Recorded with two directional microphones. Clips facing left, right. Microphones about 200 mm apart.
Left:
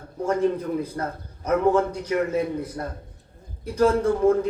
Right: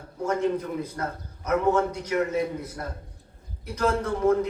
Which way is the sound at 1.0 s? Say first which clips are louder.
Left 2 dB; 30° left (ahead or behind).